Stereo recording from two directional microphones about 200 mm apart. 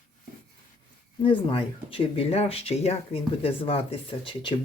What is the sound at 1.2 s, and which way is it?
Speech, 25° left (ahead or behind).